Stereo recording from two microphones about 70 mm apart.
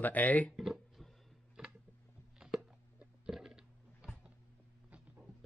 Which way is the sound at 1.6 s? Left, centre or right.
Centre.